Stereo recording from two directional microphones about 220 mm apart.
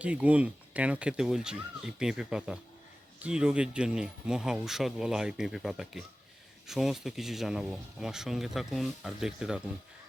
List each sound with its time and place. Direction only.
0.0 s speech: 5° right (ahead or behind)